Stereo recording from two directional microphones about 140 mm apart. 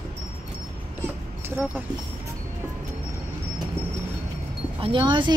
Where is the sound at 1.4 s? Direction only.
15° right (ahead or behind).